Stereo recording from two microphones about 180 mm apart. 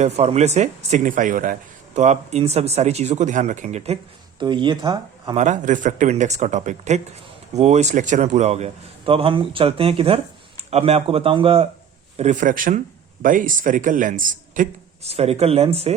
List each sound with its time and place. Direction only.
0.0 s speech: 35° right (ahead or behind)
4.4 s speech: 25° right (ahead or behind)
5.4 s a man's voice: 45° right (ahead or behind)